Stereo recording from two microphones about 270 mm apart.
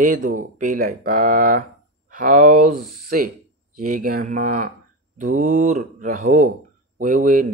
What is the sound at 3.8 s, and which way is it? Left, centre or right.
Speech, right.